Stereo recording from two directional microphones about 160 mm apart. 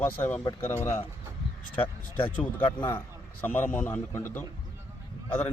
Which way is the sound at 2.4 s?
10° left (ahead or behind).